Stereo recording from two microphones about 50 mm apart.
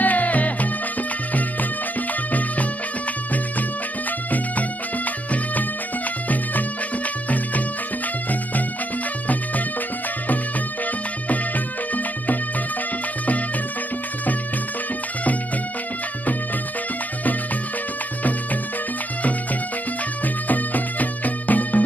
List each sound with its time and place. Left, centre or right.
0.0 s music: left
4.3 s music: left
11.2 s music: left
20.4 s music: left